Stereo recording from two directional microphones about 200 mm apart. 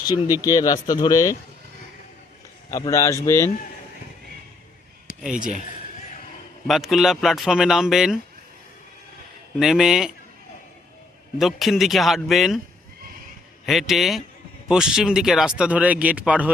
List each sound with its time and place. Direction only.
0.4 s speech: 20° left (ahead or behind)
2.6 s a man's voice: 15° left (ahead or behind)
5.4 s speech: 40° right (ahead or behind)
6.7 s speech: centre (ahead or behind)
9.6 s speech: centre (ahead or behind)
11.3 s speech: centre (ahead or behind)
13.7 s speech: centre (ahead or behind)